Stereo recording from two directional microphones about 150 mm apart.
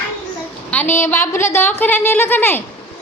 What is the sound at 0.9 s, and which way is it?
A woman's voice, 15° left (ahead or behind).